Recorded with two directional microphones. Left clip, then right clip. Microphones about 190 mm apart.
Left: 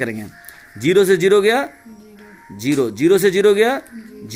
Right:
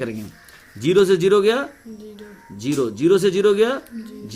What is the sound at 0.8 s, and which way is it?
Speech, 20° left (ahead or behind).